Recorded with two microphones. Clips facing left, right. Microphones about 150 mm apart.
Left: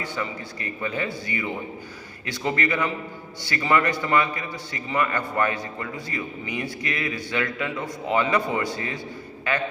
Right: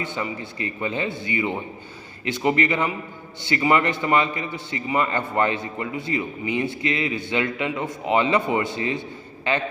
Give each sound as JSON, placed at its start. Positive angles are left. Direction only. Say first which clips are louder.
{"t": 0.0, "sound": "a man's voice", "louder": "right 2 dB", "side_deg": -20}